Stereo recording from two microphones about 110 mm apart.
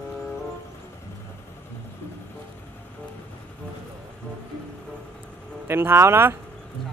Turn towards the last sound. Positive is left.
turn(degrees=-20)  # may be behind; listen again after turning